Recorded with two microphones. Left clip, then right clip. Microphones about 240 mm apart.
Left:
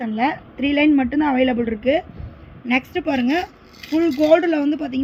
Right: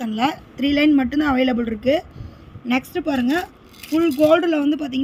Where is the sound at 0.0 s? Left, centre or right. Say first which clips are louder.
Left 1 dB; right.